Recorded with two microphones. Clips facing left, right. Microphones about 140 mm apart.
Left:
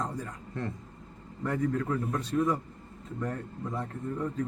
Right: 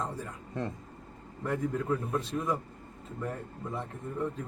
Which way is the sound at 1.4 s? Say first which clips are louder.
Left 1 dB; 5° right (ahead or behind).